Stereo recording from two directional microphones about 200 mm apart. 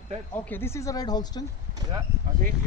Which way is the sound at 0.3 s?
10° left (ahead or behind).